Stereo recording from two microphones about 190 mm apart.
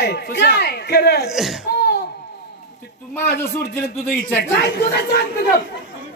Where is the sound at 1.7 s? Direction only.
60° left (ahead or behind).